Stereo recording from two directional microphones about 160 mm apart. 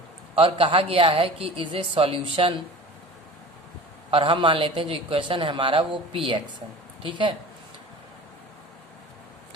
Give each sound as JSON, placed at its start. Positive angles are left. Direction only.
{"t": 0.3, "sound": "a man's voice", "side_deg": -35}
{"t": 4.1, "sound": "a man's voice", "side_deg": -35}